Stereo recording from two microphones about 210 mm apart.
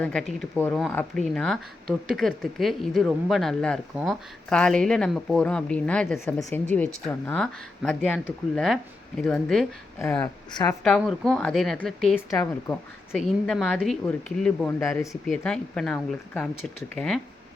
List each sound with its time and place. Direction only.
0.0 s a woman's voice: 5° left (ahead or behind)
10.8 s speech: centre (ahead or behind)
12.3 s a woman's voice: 15° left (ahead or behind)
13.1 s a woman's voice: centre (ahead or behind)
15.3 s speech: 5° left (ahead or behind)